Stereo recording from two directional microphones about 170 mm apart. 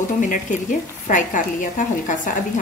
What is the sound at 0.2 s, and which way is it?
Speech, 50° left (ahead or behind).